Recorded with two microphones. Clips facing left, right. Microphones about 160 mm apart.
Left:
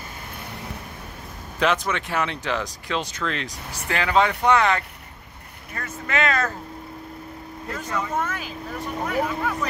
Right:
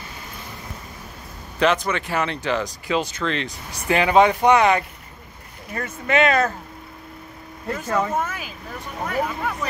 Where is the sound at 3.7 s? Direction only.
20° right (ahead or behind).